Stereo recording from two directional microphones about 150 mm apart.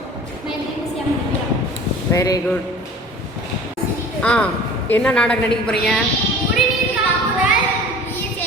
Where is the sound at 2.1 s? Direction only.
25° left (ahead or behind).